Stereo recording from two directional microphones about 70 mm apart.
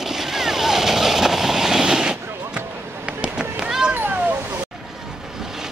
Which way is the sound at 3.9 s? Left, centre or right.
Right.